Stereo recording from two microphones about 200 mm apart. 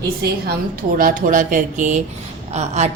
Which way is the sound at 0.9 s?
45° right (ahead or behind).